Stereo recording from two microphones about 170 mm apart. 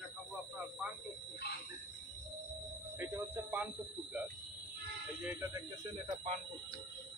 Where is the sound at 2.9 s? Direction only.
15° right (ahead or behind).